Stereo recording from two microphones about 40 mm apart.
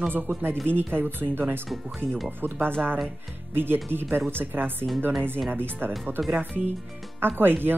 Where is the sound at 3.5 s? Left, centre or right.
Right.